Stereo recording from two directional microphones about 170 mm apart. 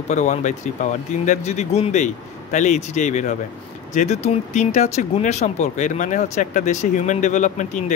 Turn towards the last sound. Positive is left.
turn(degrees=45)  # may be behind; listen again after turning